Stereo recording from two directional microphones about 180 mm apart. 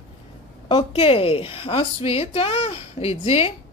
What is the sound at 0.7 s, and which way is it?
A woman's voice, 30° left (ahead or behind).